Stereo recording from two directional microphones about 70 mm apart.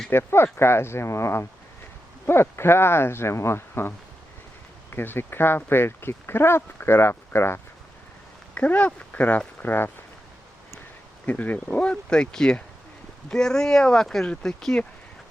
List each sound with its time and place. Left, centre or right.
0.1 s speech: left
8.5 s speech: left
11.3 s speech: left